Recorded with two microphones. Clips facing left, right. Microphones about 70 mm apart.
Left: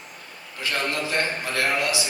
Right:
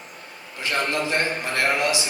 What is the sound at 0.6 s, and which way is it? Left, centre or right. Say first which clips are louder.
A man's voice: right 2 dB; right.